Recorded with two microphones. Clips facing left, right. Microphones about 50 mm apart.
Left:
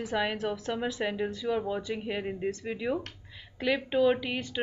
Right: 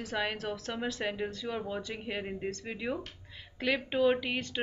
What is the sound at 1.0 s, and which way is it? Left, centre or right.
Speech, centre.